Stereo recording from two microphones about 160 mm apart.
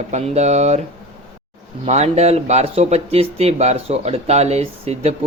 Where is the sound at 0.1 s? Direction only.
45° right (ahead or behind).